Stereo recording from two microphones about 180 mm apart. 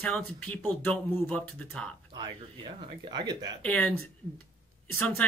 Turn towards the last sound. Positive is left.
turn(degrees=10)  # may be behind; listen again after turning